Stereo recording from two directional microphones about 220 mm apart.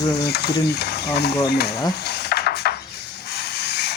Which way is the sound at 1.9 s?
50° left (ahead or behind).